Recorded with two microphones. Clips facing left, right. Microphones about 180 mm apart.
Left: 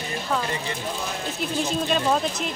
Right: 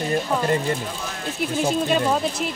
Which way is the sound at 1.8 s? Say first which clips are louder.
Right 2 dB; 5° right (ahead or behind).